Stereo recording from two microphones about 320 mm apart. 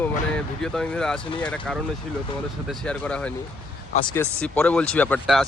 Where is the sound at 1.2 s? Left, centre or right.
Centre.